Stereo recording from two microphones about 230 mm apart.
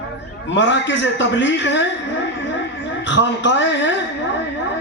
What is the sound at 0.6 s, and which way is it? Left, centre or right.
A man's voice, left.